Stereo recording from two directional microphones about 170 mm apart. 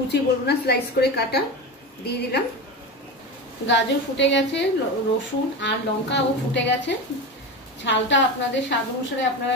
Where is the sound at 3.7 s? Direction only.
90° left.